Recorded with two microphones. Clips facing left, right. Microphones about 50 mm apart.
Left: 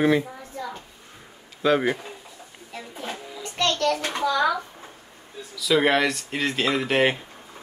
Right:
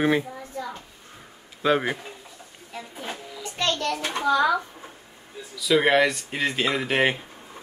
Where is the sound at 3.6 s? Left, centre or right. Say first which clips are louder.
Left 3 dB; left.